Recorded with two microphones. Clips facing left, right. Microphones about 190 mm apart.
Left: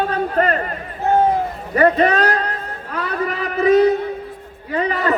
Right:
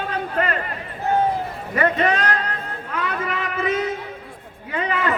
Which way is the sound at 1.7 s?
40° left (ahead or behind).